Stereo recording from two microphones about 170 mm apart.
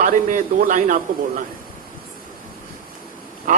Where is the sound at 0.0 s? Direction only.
50° right (ahead or behind).